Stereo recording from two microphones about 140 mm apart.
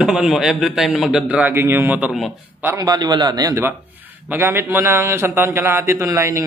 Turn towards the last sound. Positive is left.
turn(degrees=-20)  # may be behind; listen again after turning